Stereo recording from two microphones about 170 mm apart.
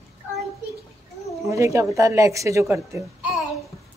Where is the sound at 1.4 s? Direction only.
15° right (ahead or behind).